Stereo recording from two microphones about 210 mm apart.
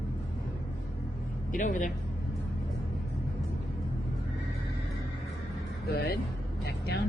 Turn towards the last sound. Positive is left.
turn(degrees=50)  # may be behind; listen again after turning